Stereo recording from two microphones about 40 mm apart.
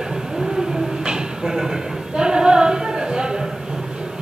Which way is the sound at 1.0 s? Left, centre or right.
Centre.